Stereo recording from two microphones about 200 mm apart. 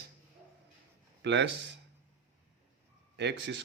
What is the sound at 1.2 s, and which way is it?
Speech, 60° right (ahead or behind).